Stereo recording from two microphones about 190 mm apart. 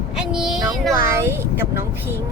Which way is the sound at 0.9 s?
15° right (ahead or behind).